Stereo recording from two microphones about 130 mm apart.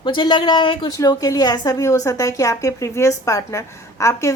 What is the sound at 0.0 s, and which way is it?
Speech, 35° left (ahead or behind).